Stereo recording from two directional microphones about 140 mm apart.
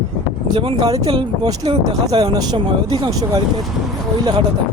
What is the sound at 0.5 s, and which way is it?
Speech, 35° right (ahead or behind).